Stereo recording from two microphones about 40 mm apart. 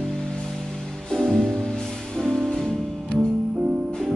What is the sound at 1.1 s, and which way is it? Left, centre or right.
Music, centre.